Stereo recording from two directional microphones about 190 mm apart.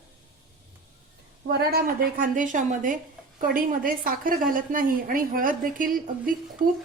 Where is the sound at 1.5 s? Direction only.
55° right (ahead or behind).